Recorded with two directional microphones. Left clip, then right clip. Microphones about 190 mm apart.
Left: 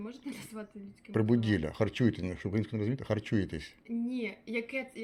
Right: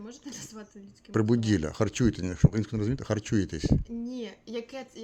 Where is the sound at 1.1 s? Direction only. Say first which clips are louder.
Right 3 dB; 55° right (ahead or behind).